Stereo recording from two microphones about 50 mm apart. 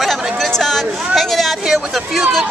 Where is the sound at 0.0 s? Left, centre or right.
Centre.